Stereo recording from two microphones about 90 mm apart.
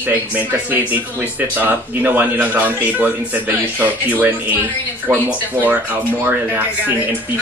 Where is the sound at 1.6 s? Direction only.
20° right (ahead or behind).